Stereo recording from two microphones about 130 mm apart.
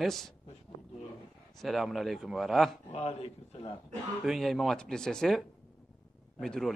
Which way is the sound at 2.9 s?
55° left (ahead or behind).